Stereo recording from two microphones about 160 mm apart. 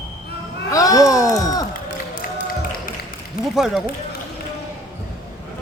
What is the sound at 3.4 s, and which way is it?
Speech, 5° right (ahead or behind).